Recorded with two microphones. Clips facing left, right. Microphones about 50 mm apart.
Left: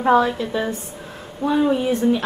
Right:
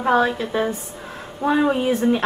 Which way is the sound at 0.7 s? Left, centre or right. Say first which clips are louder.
Right 1 dB; right.